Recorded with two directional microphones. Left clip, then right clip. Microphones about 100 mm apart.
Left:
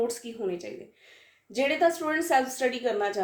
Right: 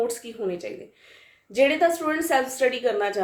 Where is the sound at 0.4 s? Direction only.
25° right (ahead or behind).